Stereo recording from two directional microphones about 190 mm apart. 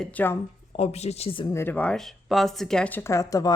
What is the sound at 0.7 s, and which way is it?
Speech, 35° left (ahead or behind).